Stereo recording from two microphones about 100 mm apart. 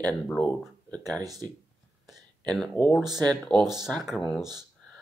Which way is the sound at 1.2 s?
40° right (ahead or behind).